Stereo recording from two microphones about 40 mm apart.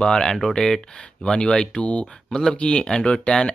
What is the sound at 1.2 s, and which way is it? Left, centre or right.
Speech, left.